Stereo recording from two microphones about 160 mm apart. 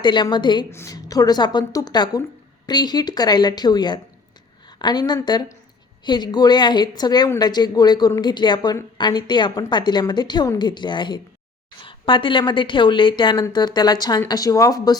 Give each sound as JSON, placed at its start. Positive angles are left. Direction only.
{"t": 0.0, "sound": "a woman's voice", "side_deg": 30}
{"t": 0.7, "sound": "a woman's voice", "side_deg": 20}